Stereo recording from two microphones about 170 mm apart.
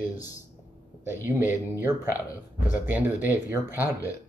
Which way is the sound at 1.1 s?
15° right (ahead or behind).